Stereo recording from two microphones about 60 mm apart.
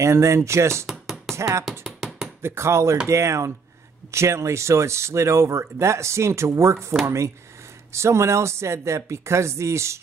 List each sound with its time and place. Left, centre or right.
0.0 s speech: right
2.0 s a sound: centre
2.4 s speech: right